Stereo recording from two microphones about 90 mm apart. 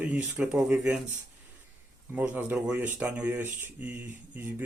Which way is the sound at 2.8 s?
20° right (ahead or behind).